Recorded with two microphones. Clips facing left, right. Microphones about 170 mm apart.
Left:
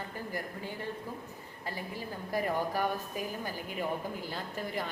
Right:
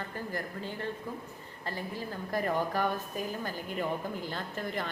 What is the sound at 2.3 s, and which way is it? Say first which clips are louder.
A woman's voice: right 1 dB; 10° left (ahead or behind).